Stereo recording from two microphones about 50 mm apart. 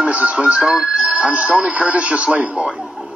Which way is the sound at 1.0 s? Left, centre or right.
Right.